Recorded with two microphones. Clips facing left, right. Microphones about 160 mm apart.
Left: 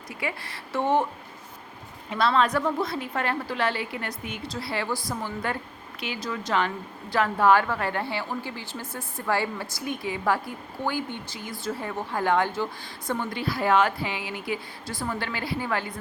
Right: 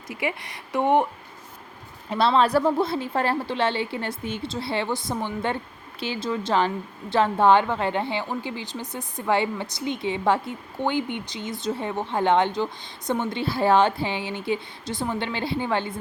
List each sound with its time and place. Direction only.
0.2 s speech: 20° right (ahead or behind)
2.0 s a woman's voice: 30° right (ahead or behind)